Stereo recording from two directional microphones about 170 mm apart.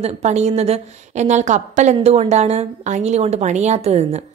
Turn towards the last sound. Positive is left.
turn(degrees=-40)  # may be behind; listen again after turning